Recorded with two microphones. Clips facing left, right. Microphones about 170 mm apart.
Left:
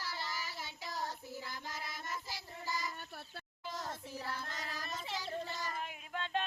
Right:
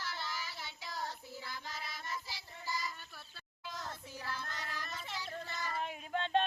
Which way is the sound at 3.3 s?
45° left (ahead or behind).